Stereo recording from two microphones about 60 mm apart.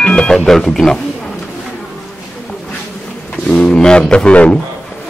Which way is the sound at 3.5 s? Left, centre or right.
Centre.